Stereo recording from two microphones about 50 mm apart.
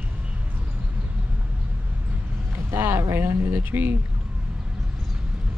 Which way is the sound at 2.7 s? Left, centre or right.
Right.